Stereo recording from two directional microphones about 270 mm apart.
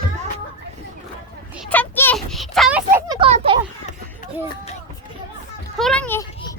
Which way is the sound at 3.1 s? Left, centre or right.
Centre.